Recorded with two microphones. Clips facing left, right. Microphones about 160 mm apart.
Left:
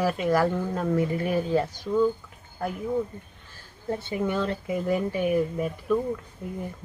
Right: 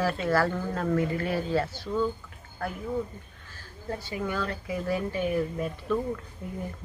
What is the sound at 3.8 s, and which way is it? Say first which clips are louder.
Speech: left 5 dB; 25° left (ahead or behind).